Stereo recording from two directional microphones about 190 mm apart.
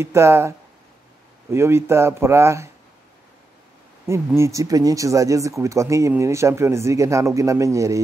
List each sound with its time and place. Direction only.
0.0 s speech: 15° right (ahead or behind)
4.4 s speech: 15° right (ahead or behind)